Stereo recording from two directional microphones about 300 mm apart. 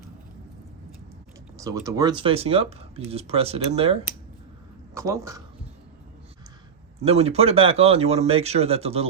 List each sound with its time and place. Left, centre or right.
1.5 s speech: centre
7.0 s speech: centre